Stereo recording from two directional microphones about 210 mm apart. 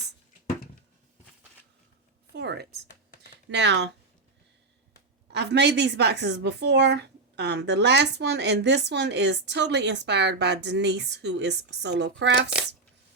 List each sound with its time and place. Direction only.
2.3 s a woman's voice: 50° right (ahead or behind)
5.3 s a woman's voice: 55° right (ahead or behind)
12.5 s speech: 5° right (ahead or behind)